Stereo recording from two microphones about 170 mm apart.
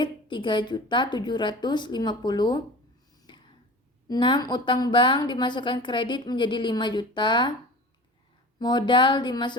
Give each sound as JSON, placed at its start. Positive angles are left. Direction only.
{"t": 0.0, "sound": "a woman's voice", "side_deg": 30}
{"t": 3.3, "sound": "whispering", "side_deg": 25}
{"t": 4.1, "sound": "a woman's voice", "side_deg": 25}
{"t": 8.5, "sound": "a woman's voice", "side_deg": 25}